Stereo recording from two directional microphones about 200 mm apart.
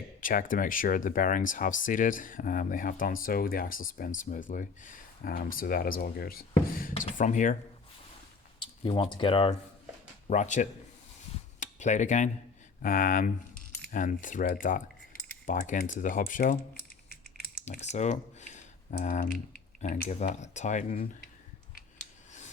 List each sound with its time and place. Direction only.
0.2 s speech: 40° left (ahead or behind)
8.5 s speech: 25° left (ahead or behind)
12.8 s keys jangling: 45° left (ahead or behind)
15.4 s speech: 40° left (ahead or behind)
17.7 s typing: 35° left (ahead or behind)
19.8 s speech: 35° left (ahead or behind)
22.3 s scissors: 35° left (ahead or behind)